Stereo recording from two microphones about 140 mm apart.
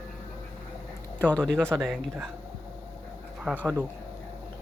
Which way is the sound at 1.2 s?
5° left (ahead or behind).